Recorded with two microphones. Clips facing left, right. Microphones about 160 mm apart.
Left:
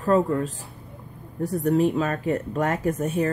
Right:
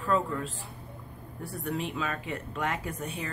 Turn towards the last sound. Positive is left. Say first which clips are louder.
# left 13 dB
turn(degrees=45)  # may be behind; listen again after turning